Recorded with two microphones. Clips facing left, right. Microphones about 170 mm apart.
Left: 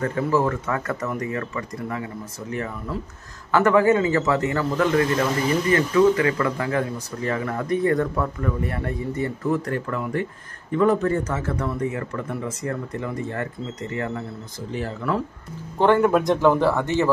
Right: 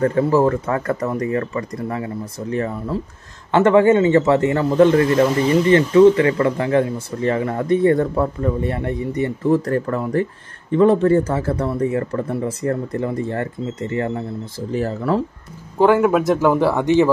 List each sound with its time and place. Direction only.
0.0 s speech: 35° right (ahead or behind)
15.8 s speech: 5° right (ahead or behind)